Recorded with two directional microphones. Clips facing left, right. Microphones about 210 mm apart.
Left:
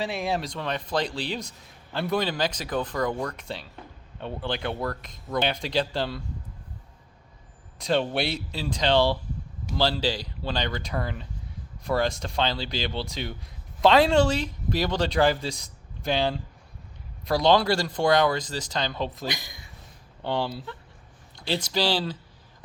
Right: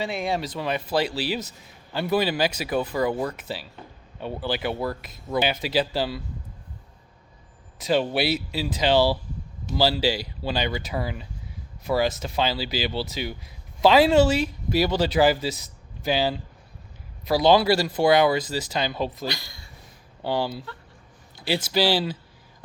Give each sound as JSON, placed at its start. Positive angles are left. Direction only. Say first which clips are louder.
{"t": 0.0, "sound": "speech", "louder": "right 1 dB", "side_deg": 0}
{"t": 7.8, "sound": "speech", "louder": "right 2 dB", "side_deg": -5}
{"t": 19.3, "sound": "speech", "louder": "right 1 dB", "side_deg": 20}
{"t": 20.2, "sound": "speech", "louder": "right 2 dB", "side_deg": -5}